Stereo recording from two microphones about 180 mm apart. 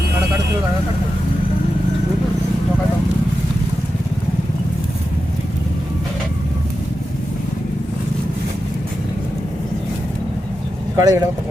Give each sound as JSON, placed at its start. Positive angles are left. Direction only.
{"t": 10.9, "sound": "speech", "side_deg": -20}